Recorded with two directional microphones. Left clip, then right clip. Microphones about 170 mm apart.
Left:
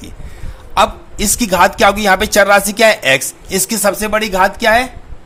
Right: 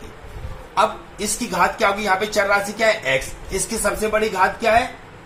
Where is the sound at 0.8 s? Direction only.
60° left (ahead or behind).